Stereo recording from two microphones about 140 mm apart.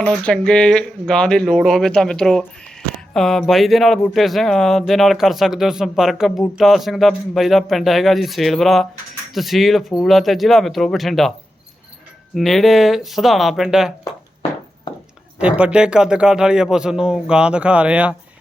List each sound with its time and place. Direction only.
0.0 s speech: 5° left (ahead or behind)
14.9 s a sound: 35° left (ahead or behind)
15.4 s speech: 10° right (ahead or behind)